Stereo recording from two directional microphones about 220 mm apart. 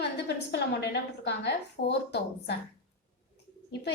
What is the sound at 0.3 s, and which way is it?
A woman's voice, 50° left (ahead or behind).